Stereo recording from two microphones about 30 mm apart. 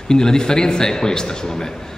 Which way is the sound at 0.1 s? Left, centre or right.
Left.